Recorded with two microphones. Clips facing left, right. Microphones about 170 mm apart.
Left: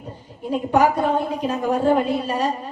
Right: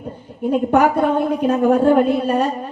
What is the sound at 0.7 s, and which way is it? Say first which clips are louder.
A woman's voice: right 1 dB; 55° right (ahead or behind).